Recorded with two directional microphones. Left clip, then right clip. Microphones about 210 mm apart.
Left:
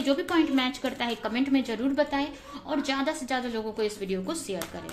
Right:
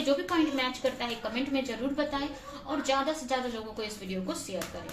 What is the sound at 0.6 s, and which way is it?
A woman's voice, 55° left (ahead or behind).